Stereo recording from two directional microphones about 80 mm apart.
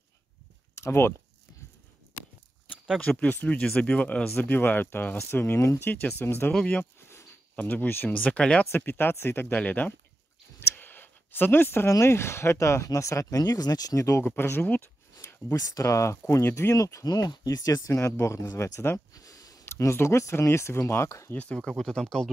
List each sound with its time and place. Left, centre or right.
0.7 s speech: left
3.0 s speech: centre
6.5 s speech: centre
6.8 s a sound: left
7.5 s speech: left
8.7 s speech: left
10.6 s a sound: left
11.9 s speech: left
14.2 s speech: left
15.5 s speech: left
17.8 s speech: left
19.1 s a sound: left
19.6 s speech: left
21.3 s speech: centre